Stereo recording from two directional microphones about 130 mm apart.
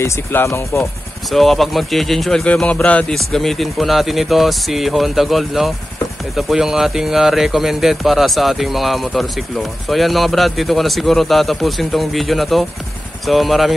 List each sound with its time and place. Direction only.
0.0 s speech: 20° left (ahead or behind)
1.3 s speech: centre (ahead or behind)